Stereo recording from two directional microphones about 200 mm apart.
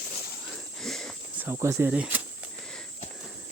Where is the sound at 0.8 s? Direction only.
Centre (ahead or behind).